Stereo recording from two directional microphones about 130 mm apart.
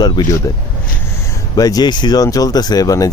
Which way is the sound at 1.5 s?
30° left (ahead or behind).